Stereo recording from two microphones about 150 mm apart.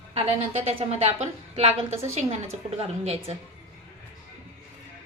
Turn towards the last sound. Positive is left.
turn(degrees=-45)  # may be behind; listen again after turning